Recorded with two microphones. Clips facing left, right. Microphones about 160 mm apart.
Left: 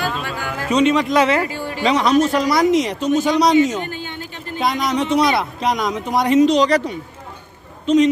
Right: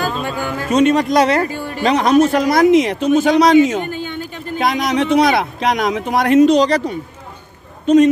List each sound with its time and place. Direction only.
0.0 s music: 40° right (ahead or behind)
0.7 s speech: 50° right (ahead or behind)
5.6 s speech: 70° right (ahead or behind); by 6.6 s 55° right (ahead or behind)
7.8 s a man's voice: 50° right (ahead or behind)